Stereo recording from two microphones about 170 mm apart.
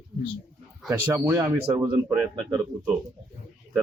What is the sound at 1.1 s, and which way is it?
Speech, 20° right (ahead or behind).